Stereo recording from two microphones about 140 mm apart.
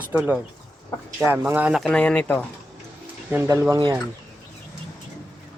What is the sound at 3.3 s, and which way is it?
Speech, 15° right (ahead or behind).